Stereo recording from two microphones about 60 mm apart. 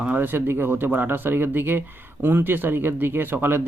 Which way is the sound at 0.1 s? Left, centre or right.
Right.